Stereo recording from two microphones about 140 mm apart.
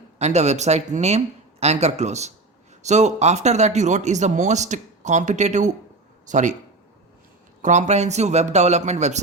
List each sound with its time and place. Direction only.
0.2 s speech: 55° right (ahead or behind)
7.6 s speech: 55° right (ahead or behind)